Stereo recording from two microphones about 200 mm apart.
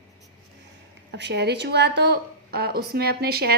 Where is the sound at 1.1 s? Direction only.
55° right (ahead or behind).